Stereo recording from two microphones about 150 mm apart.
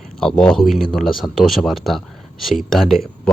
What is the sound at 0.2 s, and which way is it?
Speech, 5° left (ahead or behind).